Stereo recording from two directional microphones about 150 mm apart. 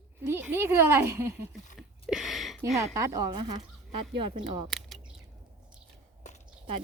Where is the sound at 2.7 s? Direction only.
20° right (ahead or behind).